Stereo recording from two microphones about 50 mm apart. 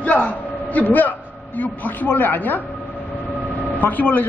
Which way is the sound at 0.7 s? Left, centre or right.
Left.